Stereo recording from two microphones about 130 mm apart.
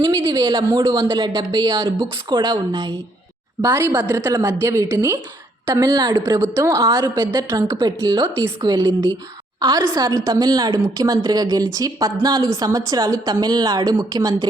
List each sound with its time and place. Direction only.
0.0 s a sound: 35° right (ahead or behind)
0.8 s speech: 35° right (ahead or behind)
3.8 s a woman's voice: 25° right (ahead or behind)